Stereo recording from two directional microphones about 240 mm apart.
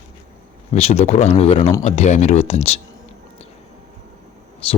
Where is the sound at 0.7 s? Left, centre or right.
Left.